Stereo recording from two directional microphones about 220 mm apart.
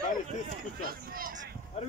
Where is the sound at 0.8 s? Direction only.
40° right (ahead or behind).